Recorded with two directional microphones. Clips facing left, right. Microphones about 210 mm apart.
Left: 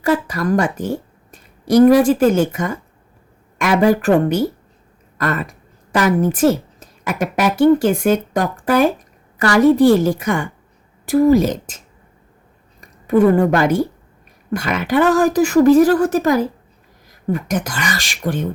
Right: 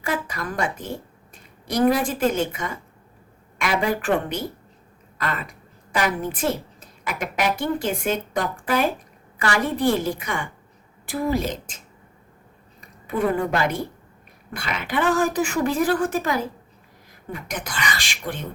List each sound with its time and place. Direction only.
0.0 s a woman's voice: 40° left (ahead or behind)
12.8 s a sound: 45° left (ahead or behind)
13.5 s a woman's voice: 45° left (ahead or behind)